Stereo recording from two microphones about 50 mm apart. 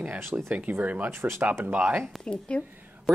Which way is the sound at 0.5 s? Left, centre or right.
Right.